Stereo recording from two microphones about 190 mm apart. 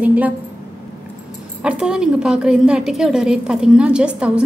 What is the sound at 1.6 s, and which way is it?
A woman's voice, 5° right (ahead or behind).